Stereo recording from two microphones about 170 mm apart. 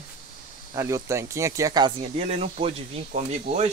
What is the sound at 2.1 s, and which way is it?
Speech, 40° right (ahead or behind).